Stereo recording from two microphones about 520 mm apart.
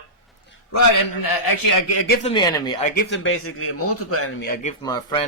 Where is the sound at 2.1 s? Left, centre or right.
Centre.